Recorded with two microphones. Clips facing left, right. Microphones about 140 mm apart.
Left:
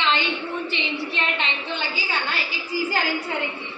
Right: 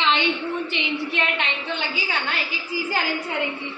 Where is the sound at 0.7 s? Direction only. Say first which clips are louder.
Right 2 dB; 10° right (ahead or behind).